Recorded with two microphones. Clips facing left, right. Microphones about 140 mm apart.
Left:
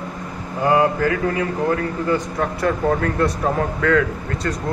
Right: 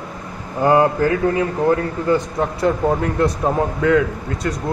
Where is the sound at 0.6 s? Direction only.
30° right (ahead or behind).